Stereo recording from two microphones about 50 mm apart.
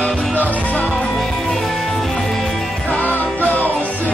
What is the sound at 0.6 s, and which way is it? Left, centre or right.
Music, left.